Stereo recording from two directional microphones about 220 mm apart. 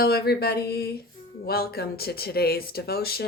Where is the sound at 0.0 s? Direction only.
45° left (ahead or behind).